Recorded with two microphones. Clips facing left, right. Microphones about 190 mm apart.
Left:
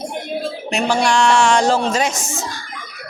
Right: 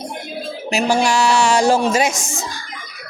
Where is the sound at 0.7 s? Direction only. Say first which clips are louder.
Right 1 dB; 5° right (ahead or behind).